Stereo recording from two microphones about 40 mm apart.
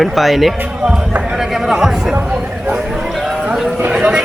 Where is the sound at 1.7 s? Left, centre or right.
Centre.